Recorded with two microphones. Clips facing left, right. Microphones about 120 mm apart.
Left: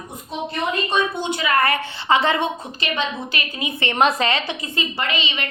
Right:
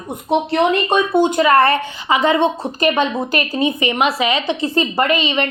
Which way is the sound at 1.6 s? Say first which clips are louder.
Right 6 dB; 30° right (ahead or behind).